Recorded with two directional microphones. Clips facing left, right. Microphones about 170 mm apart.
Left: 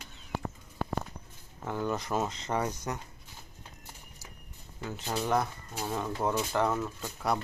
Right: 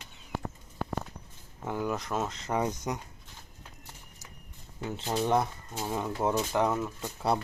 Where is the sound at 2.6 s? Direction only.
15° right (ahead or behind).